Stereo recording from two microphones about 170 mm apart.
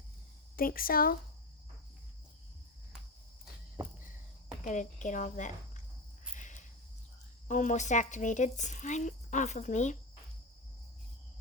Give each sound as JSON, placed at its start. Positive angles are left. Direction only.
{"t": 0.5, "sound": "speech", "side_deg": 60}
{"t": 4.6, "sound": "speech", "side_deg": 50}
{"t": 6.3, "sound": "cricket", "side_deg": 45}
{"t": 7.4, "sound": "speech", "side_deg": 50}